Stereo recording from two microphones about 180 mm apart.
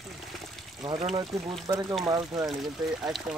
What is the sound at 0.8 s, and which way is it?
Speech, 30° right (ahead or behind).